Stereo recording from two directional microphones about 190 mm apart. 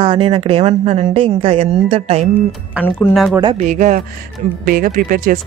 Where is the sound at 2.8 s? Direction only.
5° right (ahead or behind).